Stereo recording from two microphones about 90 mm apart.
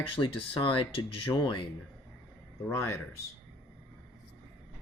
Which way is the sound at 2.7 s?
35° left (ahead or behind).